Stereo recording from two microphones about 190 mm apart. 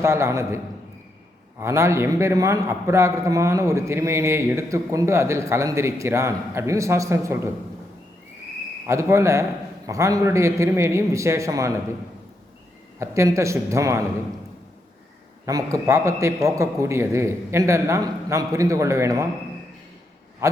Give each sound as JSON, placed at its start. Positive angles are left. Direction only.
{"t": 0.0, "sound": "a man's voice", "side_deg": -15}
{"t": 8.9, "sound": "a man's voice", "side_deg": -15}
{"t": 13.0, "sound": "a man's voice", "side_deg": -15}
{"t": 15.4, "sound": "a man's voice", "side_deg": -20}
{"t": 20.4, "sound": "a man's voice", "side_deg": -15}